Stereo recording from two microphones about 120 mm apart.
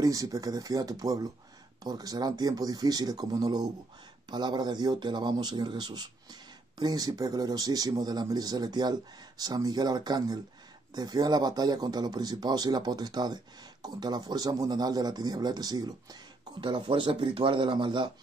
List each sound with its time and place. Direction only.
0.0 s a man's voice: 30° right (ahead or behind)
16.6 s speech: 45° right (ahead or behind)